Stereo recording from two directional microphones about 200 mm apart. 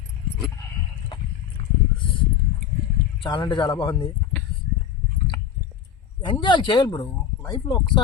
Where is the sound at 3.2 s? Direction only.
20° left (ahead or behind).